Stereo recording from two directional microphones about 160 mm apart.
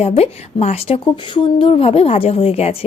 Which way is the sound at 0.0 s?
40° left (ahead or behind).